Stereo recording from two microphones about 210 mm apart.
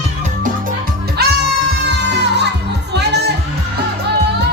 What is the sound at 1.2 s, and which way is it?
Music, 50° right (ahead or behind).